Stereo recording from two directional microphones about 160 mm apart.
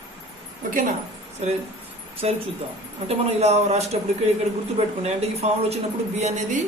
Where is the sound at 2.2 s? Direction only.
40° right (ahead or behind).